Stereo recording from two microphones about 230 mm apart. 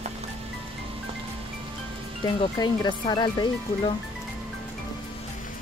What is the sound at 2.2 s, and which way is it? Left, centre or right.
Speech, centre.